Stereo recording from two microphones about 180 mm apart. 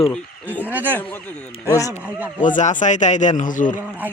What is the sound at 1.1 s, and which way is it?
Speech, 10° left (ahead or behind).